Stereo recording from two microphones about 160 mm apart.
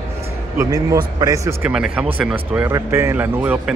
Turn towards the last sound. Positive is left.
turn(degrees=-10)  # may be behind; listen again after turning